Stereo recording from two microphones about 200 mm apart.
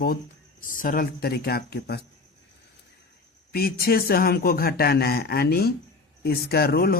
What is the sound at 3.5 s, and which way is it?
A man's voice, 50° left (ahead or behind).